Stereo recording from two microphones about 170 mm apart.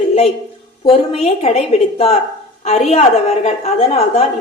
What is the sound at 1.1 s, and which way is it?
A woman's voice, 40° left (ahead or behind).